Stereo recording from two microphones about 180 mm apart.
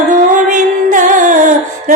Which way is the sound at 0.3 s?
45° right (ahead or behind).